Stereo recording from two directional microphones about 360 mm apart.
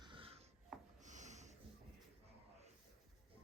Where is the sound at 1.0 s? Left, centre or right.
Centre.